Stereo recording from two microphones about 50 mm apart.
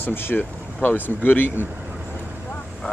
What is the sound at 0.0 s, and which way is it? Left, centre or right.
Speech, left.